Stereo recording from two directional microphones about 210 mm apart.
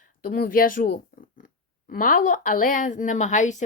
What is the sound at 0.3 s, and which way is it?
A woman's voice, 45° left (ahead or behind).